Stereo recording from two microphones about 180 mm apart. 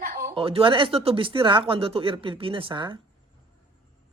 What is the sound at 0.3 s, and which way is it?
Speech, 30° right (ahead or behind).